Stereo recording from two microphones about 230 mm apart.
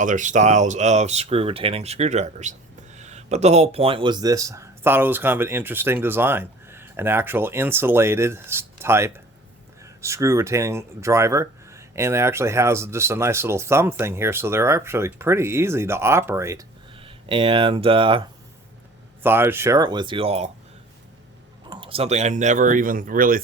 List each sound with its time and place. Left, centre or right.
0.0 s speech: right; by 16.6 s centre
17.0 s speech: right
19.2 s speech: centre; by 20.5 s right
21.7 s speech: right